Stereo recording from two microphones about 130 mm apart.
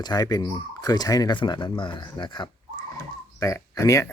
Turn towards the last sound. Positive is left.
turn(degrees=25)  # may be behind; listen again after turning